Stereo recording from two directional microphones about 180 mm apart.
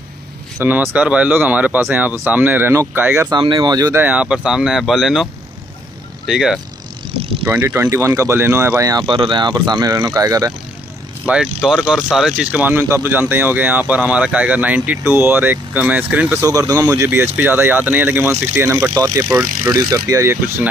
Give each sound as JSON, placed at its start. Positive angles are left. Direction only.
{"t": 0.6, "sound": "speech", "side_deg": -10}
{"t": 4.0, "sound": "speech", "side_deg": -5}
{"t": 11.2, "sound": "speech", "side_deg": -5}
{"t": 16.4, "sound": "speech", "side_deg": -20}